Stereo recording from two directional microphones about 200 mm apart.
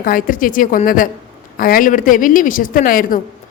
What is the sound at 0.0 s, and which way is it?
A woman's voice, 45° left (ahead or behind).